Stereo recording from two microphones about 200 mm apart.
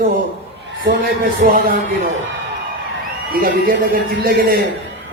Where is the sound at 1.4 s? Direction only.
45° right (ahead or behind).